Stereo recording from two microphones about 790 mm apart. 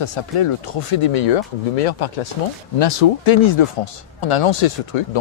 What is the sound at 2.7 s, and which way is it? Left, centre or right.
Speech, left.